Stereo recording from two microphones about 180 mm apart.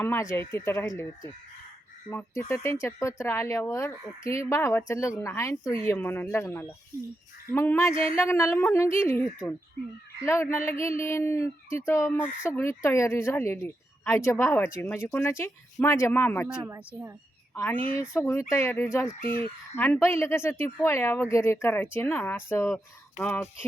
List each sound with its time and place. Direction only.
0.0 s a woman's voice: 10° left (ahead or behind)
16.6 s speech: 15° right (ahead or behind)
17.5 s a woman's voice: 10° left (ahead or behind)